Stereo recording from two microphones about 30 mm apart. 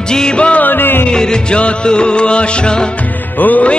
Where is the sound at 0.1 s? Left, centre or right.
Left.